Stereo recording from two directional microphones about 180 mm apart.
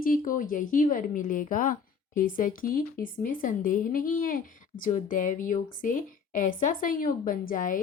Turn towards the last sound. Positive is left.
turn(degrees=50)  # may be behind; listen again after turning